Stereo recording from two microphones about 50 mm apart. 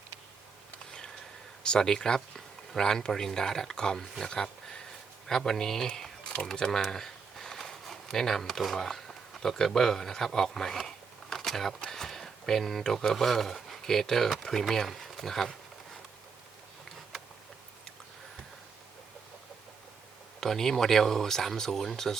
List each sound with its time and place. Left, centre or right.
0.9 s a sound: centre
1.6 s speech: centre
20.4 s speech: centre